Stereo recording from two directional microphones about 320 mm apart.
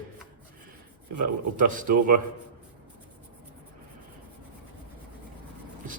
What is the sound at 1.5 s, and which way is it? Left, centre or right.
Speech, right.